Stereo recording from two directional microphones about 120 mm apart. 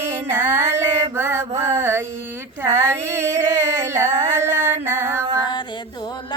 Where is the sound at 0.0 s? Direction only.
20° right (ahead or behind).